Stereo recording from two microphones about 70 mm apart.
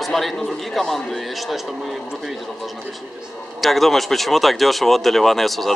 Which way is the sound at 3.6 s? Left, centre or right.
Centre.